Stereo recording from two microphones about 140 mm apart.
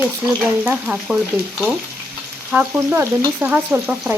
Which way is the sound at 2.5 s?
15° right (ahead or behind).